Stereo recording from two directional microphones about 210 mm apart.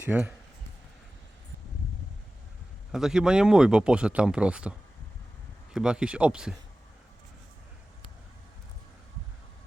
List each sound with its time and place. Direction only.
0.0 s speech: 10° right (ahead or behind)
2.9 s speech: 5° right (ahead or behind)
5.7 s speech: 5° right (ahead or behind)